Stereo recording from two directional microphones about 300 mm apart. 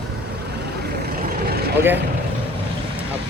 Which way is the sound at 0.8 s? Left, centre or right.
Right.